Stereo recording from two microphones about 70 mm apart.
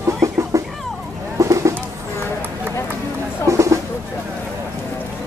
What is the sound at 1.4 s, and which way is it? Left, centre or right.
Bird, right.